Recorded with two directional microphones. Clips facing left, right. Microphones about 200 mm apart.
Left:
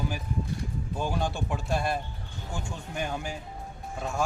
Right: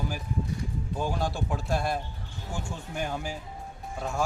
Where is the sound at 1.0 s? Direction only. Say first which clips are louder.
Even; centre (ahead or behind).